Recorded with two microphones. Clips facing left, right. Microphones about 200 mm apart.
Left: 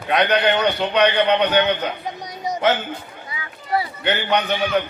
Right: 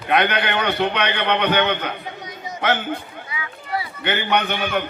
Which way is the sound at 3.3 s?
40° left (ahead or behind).